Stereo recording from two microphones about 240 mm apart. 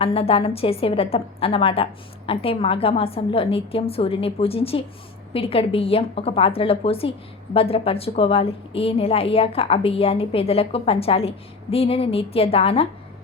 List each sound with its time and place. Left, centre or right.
0.0 s a woman's voice: left